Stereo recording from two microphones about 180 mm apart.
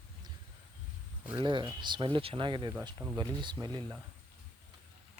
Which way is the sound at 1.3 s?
25° right (ahead or behind).